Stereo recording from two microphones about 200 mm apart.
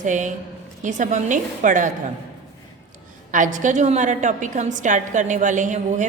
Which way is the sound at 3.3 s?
40° right (ahead or behind).